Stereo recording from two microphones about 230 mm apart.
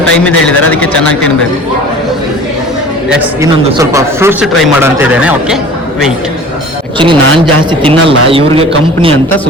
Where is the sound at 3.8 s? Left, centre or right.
Centre.